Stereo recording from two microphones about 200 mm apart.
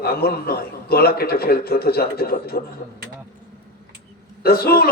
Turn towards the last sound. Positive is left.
turn(degrees=50)  # may be behind; listen again after turning